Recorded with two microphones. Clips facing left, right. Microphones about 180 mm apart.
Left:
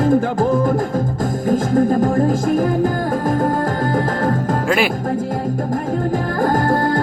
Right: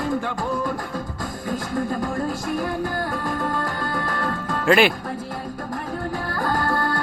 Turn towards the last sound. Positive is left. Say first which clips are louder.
# left 7 dB
turn(degrees=45)  # may be behind; listen again after turning